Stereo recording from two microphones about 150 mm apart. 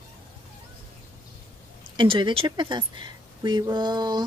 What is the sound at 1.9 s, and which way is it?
Speech, 30° right (ahead or behind).